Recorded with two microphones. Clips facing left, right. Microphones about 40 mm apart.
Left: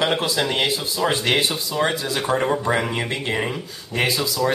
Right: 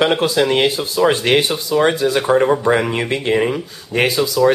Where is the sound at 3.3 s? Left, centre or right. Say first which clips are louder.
Right 7 dB; centre.